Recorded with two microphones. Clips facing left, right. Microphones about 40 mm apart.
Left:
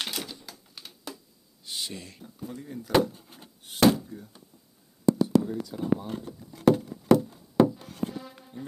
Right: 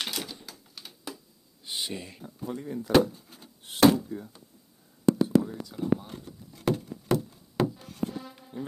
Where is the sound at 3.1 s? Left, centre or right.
Left.